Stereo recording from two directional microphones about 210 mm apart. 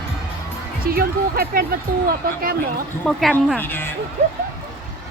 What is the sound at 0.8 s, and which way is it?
Speech, 45° right (ahead or behind).